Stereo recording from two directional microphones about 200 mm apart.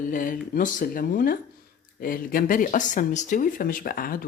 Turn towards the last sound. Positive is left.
turn(degrees=45)  # may be behind; listen again after turning